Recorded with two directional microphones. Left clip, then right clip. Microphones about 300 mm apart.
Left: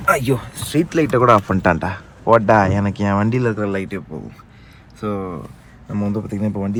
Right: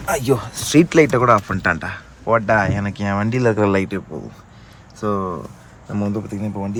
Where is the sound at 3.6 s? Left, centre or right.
Right.